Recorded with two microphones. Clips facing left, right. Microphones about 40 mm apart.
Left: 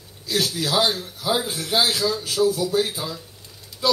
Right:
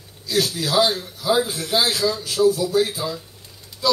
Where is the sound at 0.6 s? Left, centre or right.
Centre.